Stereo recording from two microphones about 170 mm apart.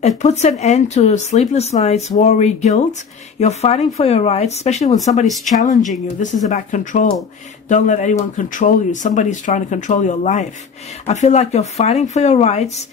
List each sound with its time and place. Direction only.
0.2 s speech: 40° left (ahead or behind)
5.2 s speech: centre (ahead or behind)
5.6 s speech: 45° left (ahead or behind)